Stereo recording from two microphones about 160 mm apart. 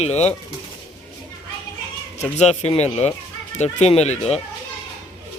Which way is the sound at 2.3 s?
45° left (ahead or behind).